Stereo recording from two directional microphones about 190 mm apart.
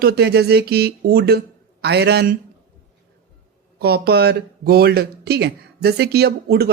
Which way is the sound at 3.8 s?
55° right (ahead or behind).